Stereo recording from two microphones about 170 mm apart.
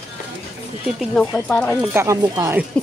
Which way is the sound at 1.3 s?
10° left (ahead or behind).